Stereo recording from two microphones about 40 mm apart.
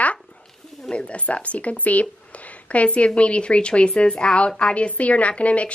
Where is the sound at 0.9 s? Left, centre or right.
Left.